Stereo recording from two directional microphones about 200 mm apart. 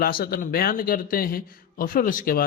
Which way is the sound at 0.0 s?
45° left (ahead or behind).